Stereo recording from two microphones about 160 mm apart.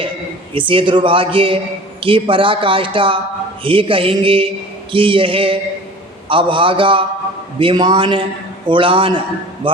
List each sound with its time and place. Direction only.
0.5 s a man's voice: 30° right (ahead or behind)